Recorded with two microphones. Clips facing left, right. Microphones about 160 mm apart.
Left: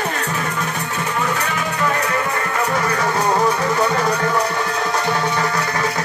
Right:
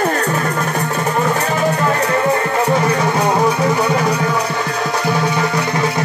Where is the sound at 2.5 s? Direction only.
30° right (ahead or behind).